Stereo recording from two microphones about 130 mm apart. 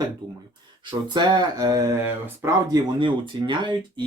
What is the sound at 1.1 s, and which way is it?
Speech, 35° right (ahead or behind).